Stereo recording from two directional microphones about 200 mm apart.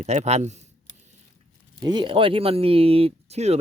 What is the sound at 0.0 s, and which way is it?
Speech, 35° right (ahead or behind).